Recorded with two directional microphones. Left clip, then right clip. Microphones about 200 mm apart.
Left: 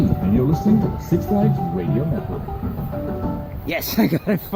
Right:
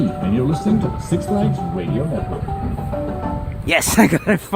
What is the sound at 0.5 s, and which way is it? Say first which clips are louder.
Speech: even; 40° right (ahead or behind).